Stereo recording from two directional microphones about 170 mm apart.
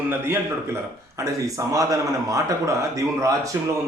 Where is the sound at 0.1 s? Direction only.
15° right (ahead or behind).